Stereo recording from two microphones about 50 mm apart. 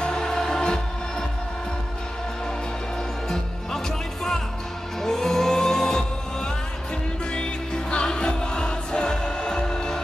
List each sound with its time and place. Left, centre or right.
0.0 s music: centre
3.3 s music: centre